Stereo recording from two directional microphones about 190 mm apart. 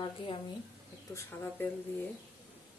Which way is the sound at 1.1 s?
10° left (ahead or behind).